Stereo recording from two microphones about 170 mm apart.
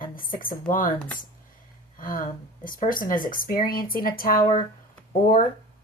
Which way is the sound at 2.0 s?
55° left (ahead or behind).